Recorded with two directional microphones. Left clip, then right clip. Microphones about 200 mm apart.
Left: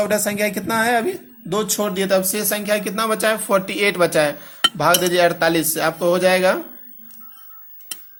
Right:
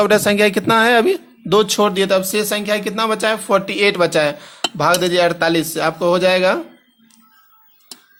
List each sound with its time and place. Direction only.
0.0 s a man's voice: 35° right (ahead or behind); by 6.6 s 15° right (ahead or behind)